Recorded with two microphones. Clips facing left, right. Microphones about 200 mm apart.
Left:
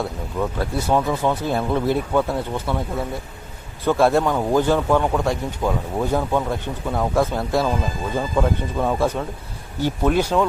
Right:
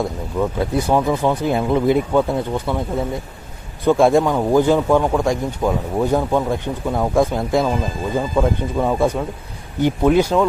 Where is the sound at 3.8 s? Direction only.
15° right (ahead or behind).